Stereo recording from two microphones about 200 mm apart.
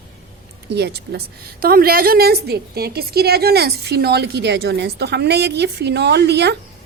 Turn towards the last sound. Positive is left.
turn(degrees=-55)  # may be behind; listen again after turning